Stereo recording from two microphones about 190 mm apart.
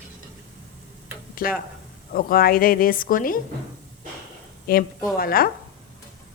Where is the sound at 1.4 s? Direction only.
45° left (ahead or behind).